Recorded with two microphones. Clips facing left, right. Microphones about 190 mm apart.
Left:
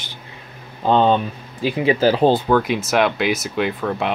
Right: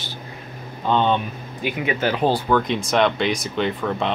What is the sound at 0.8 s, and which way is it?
Speech, 35° left (ahead or behind).